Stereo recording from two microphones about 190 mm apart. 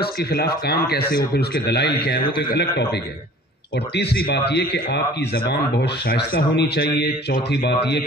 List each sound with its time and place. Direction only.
0.0 s a man's voice: 55° left (ahead or behind)